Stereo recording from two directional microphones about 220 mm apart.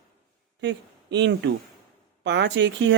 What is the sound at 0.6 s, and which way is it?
Speech, 50° right (ahead or behind).